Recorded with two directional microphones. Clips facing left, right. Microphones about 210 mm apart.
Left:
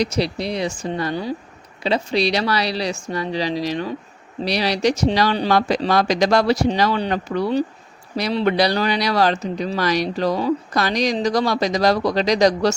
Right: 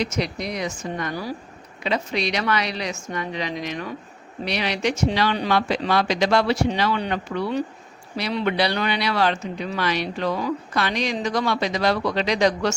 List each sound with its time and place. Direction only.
0.0 s speech: 35° left (ahead or behind)